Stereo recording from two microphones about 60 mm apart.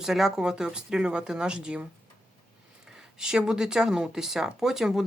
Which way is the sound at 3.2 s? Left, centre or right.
Centre.